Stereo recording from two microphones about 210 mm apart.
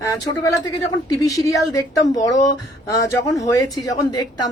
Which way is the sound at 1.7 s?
15° left (ahead or behind).